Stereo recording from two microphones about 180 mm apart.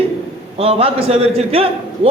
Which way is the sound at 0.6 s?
30° right (ahead or behind).